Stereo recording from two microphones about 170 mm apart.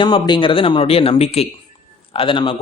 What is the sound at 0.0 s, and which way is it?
Speech, 30° left (ahead or behind).